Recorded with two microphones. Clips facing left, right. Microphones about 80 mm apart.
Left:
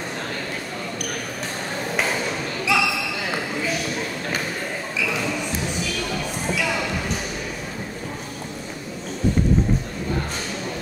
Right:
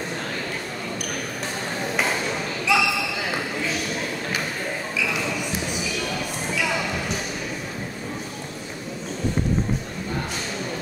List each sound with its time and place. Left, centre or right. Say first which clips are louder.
2.7 s basketball bounce: even; centre